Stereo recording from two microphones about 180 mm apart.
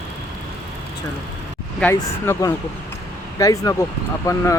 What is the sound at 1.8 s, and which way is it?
Speech, 15° left (ahead or behind).